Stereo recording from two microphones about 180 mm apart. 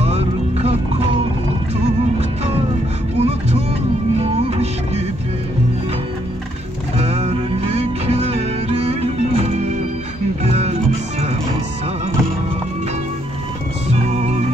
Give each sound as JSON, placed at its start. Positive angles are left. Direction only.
{"t": 0.0, "sound": "music", "side_deg": -35}
{"t": 3.2, "sound": "music", "side_deg": -35}
{"t": 7.1, "sound": "music", "side_deg": -35}
{"t": 13.8, "sound": "music", "side_deg": -40}